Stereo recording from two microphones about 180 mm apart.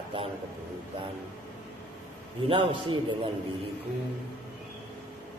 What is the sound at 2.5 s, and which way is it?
Speech, 30° right (ahead or behind).